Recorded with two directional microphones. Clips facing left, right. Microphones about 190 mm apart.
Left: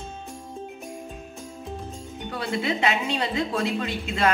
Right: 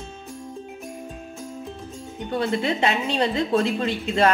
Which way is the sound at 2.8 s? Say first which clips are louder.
Right 3 dB; 30° right (ahead or behind).